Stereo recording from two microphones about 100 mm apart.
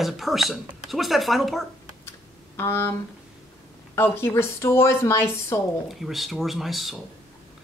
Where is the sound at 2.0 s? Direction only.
20° left (ahead or behind).